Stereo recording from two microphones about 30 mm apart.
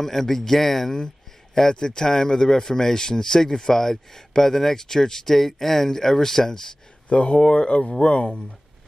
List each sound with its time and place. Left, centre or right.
0.0 s a man's voice: centre
7.1 s speech: left